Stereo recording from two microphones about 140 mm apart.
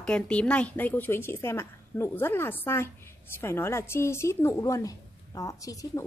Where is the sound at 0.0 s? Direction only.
10° left (ahead or behind).